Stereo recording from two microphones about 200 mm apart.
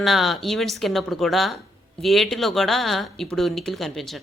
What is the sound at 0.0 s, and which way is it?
A woman's voice, centre (ahead or behind).